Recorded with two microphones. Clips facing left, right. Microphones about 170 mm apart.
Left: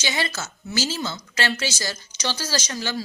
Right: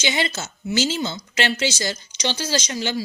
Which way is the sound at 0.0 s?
20° right (ahead or behind).